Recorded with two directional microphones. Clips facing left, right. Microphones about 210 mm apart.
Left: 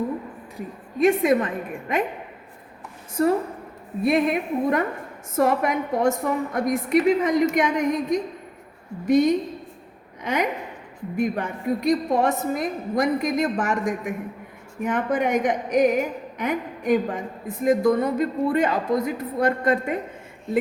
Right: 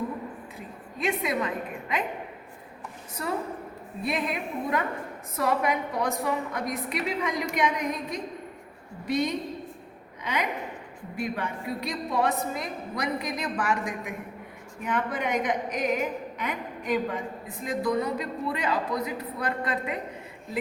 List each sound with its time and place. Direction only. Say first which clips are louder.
0.9 s a woman's voice: left 10 dB; 50° left (ahead or behind)
3.2 s a woman's voice: left 10 dB; 50° left (ahead or behind)